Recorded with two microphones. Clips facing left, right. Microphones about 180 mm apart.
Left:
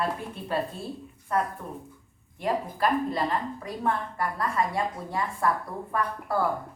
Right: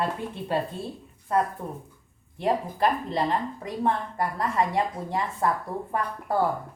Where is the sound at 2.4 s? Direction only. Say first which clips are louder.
Right 2 dB; 25° right (ahead or behind).